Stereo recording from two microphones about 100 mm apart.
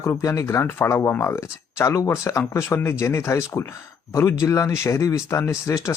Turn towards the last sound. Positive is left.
turn(degrees=30)  # may be behind; listen again after turning